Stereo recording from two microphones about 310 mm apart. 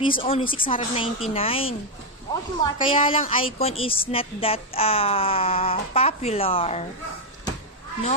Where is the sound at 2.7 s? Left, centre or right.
Centre.